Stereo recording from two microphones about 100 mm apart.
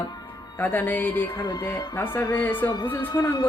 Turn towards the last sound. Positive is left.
turn(degrees=45)  # may be behind; listen again after turning